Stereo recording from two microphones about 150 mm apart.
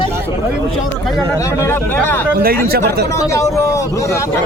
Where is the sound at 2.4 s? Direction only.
90° right.